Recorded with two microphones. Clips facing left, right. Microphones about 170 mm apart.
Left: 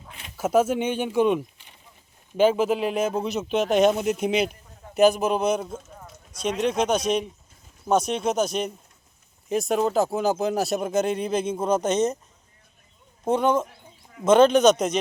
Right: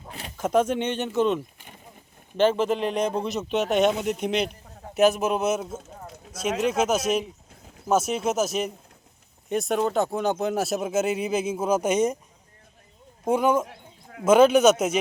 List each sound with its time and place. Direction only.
0.1 s a sound: 40° right (ahead or behind)
0.3 s speech: 5° left (ahead or behind)
1.5 s a sound: 50° right (ahead or behind)
2.4 s speech: 10° left (ahead or behind); by 12.1 s 10° right (ahead or behind)
13.2 s a man's voice: 10° right (ahead or behind)
13.7 s bird: 65° right (ahead or behind)
14.3 s a man's voice: 10° right (ahead or behind)